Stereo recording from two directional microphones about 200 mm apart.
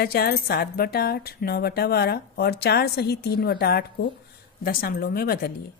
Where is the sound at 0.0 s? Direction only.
50° left (ahead or behind).